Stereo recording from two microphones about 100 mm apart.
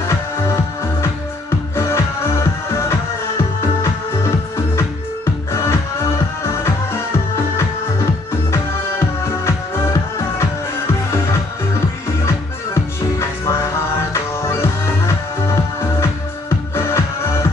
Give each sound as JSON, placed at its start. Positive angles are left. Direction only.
{"t": 1.8, "sound": "music", "side_deg": 25}
{"t": 4.7, "sound": "music", "side_deg": 25}
{"t": 13.2, "sound": "music", "side_deg": 25}